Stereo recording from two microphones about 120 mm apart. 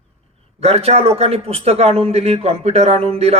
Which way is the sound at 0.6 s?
60° right (ahead or behind).